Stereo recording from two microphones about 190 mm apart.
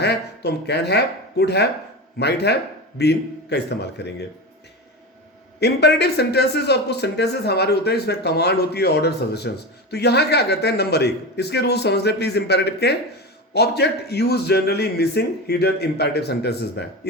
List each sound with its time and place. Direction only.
0.0 s speech: 60° left (ahead or behind)
5.5 s speech: 60° left (ahead or behind)